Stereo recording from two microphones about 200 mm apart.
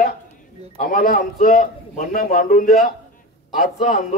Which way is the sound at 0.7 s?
45° left (ahead or behind).